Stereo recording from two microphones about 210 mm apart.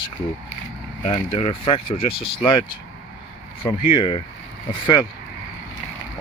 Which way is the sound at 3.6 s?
25° left (ahead or behind).